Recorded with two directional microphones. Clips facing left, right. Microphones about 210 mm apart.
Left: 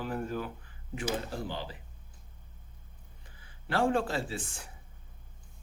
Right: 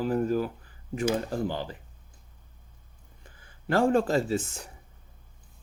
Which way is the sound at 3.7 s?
45° right (ahead or behind).